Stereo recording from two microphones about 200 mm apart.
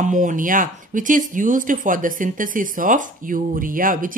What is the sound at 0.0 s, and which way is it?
Speech, 40° right (ahead or behind).